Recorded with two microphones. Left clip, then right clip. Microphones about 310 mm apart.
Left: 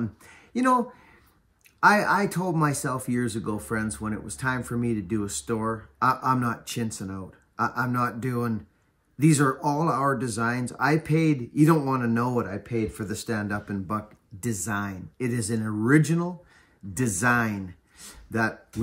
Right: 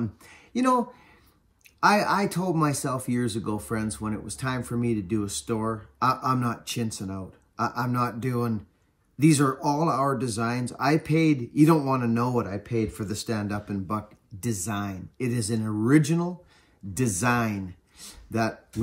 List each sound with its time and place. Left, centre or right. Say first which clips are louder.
0.0 s speech: even; centre
2.0 s speech: left 1 dB; centre